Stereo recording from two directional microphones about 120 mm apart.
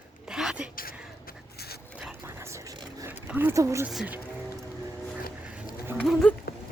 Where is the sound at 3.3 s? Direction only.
15° right (ahead or behind).